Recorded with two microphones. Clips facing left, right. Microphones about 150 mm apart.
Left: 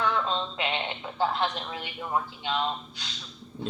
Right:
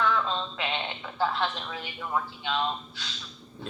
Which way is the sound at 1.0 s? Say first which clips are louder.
Left 1 dB; 20° left (ahead or behind).